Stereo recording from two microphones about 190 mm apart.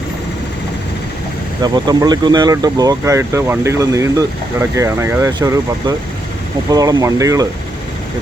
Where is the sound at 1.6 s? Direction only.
20° right (ahead or behind).